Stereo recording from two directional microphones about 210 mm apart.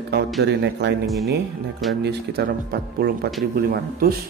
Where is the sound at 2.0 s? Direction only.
45° right (ahead or behind).